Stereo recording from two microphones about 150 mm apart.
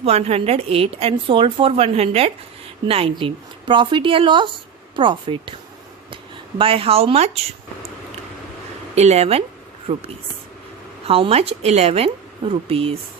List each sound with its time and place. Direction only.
0.0 s a woman's voice: 45° right (ahead or behind)
6.6 s a woman's voice: 40° right (ahead or behind)
9.0 s a woman's voice: 45° right (ahead or behind)